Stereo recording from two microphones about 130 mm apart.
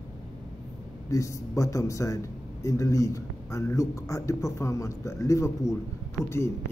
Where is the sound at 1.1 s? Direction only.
25° left (ahead or behind).